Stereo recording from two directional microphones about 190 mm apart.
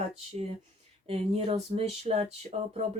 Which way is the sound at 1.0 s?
30° right (ahead or behind).